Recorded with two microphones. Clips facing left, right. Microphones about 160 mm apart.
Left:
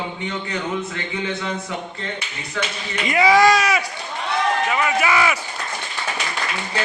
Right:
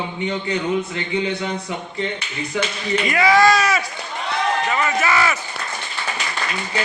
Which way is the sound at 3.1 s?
20° left (ahead or behind).